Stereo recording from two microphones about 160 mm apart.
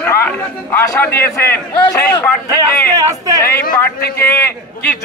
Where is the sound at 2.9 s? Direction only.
20° right (ahead or behind).